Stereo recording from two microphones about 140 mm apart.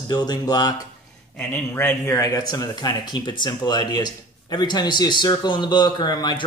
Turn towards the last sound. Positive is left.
turn(degrees=30)  # may be behind; listen again after turning